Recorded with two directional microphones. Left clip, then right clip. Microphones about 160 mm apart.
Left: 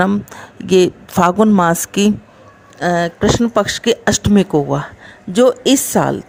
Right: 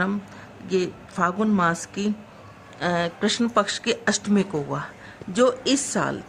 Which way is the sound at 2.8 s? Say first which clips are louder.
Left 9 dB; 50° left (ahead or behind).